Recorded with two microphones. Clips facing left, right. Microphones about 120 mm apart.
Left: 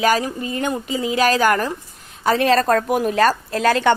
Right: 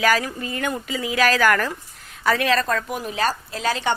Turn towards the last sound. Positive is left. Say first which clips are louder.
# left 7 dB
turn(degrees=55)  # may be behind; listen again after turning